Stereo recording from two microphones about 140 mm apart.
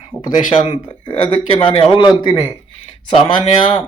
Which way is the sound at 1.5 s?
40° left (ahead or behind).